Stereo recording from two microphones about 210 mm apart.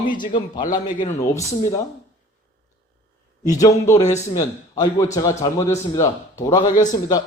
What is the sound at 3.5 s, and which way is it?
A man's voice, 15° left (ahead or behind).